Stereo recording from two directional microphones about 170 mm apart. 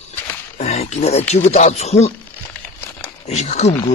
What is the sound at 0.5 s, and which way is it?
Speech, 40° left (ahead or behind).